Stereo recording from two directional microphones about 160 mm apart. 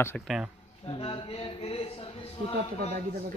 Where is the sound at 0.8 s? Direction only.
35° left (ahead or behind).